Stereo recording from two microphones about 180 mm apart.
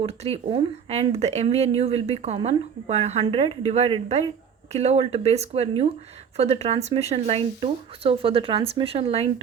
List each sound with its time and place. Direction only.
0.0 s speech: 35° right (ahead or behind)